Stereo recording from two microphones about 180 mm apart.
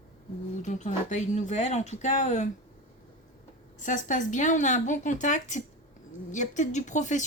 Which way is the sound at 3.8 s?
45° left (ahead or behind).